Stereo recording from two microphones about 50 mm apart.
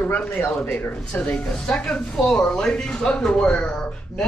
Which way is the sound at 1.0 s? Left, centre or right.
Centre.